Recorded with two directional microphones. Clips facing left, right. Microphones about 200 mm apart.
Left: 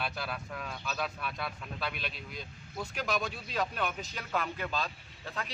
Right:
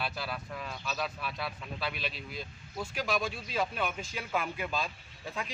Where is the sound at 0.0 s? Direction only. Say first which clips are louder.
Even; centre (ahead or behind).